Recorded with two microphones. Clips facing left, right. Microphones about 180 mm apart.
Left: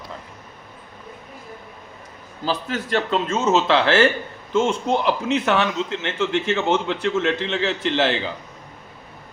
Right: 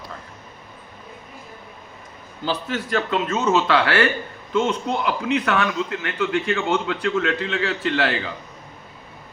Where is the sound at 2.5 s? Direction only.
40° left (ahead or behind); by 8.3 s 25° left (ahead or behind).